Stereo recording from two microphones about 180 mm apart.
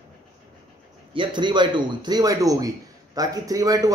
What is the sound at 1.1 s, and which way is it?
Speech, 25° right (ahead or behind).